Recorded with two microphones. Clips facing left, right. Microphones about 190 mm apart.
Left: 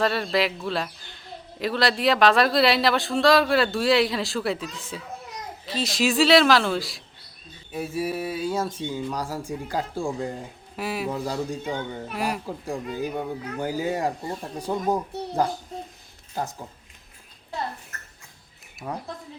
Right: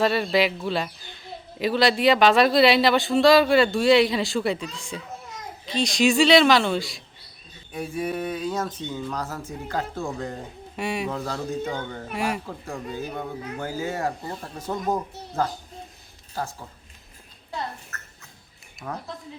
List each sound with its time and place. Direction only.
0.0 s a man's voice: centre (ahead or behind); by 12.0 s 15° left (ahead or behind)
12.1 s a man's voice: centre (ahead or behind)
12.5 s speech: 15° left (ahead or behind)
16.3 s speech: 20° left (ahead or behind)
18.9 s speech: 15° left (ahead or behind)